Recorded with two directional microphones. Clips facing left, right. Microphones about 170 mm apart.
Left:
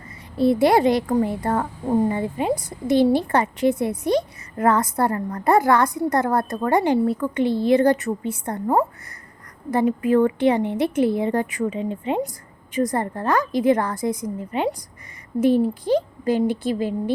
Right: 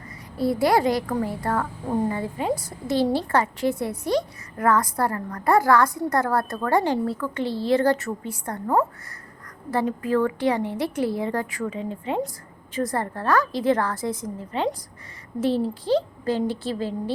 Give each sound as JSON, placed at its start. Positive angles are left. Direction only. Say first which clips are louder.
{"t": 0.3, "sound": "a woman's voice", "louder": "left 4 dB", "side_deg": 25}